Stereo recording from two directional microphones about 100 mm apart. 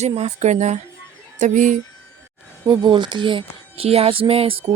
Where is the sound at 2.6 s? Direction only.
50° right (ahead or behind); by 4.6 s 70° right (ahead or behind).